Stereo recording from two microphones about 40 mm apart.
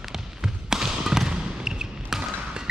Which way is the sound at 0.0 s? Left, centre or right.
Centre.